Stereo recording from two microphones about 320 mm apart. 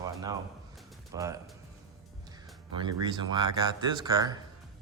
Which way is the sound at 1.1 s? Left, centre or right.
Centre.